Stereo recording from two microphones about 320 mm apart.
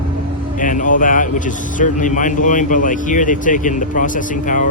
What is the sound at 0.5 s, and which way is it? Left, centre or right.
A man's voice, left.